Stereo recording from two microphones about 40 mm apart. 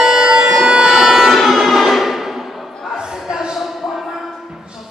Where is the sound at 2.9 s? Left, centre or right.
Centre.